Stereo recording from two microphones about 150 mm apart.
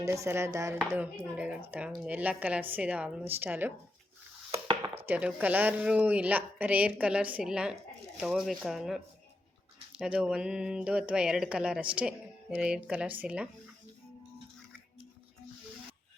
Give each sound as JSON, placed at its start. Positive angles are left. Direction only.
{"t": 0.0, "sound": "chopping", "side_deg": -20}
{"t": 0.9, "sound": "speech", "side_deg": -10}
{"t": 4.5, "sound": "chopping", "side_deg": -40}
{"t": 5.0, "sound": "speech", "side_deg": -10}
{"t": 10.0, "sound": "speech", "side_deg": -5}